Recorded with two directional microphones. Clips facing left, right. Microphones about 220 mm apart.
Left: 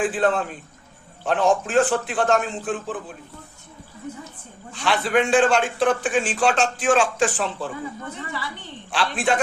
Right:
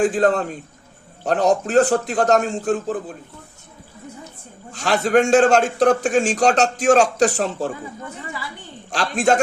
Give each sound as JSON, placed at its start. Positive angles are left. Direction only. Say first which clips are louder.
{"t": 0.0, "sound": "a man's voice", "louder": "right 4 dB", "side_deg": -40}
{"t": 4.7, "sound": "a man's voice", "louder": "right 4 dB", "side_deg": -45}
{"t": 8.9, "sound": "a man's voice", "louder": "right 4 dB", "side_deg": -40}